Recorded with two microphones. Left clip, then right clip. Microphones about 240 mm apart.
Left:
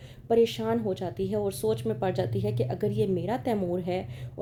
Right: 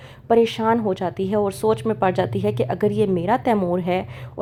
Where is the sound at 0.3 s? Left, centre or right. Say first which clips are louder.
Right 7 dB; right.